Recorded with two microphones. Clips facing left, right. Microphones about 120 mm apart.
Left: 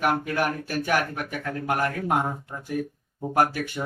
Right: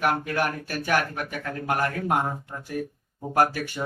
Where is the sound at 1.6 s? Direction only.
15° left (ahead or behind).